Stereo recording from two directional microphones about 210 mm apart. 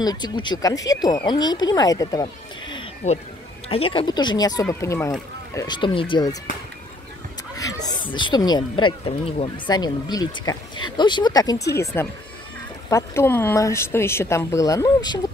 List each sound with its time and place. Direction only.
0.0 s speech: 20° left (ahead or behind)
3.0 s speech: 30° left (ahead or behind)
8.1 s speech: 20° left (ahead or behind)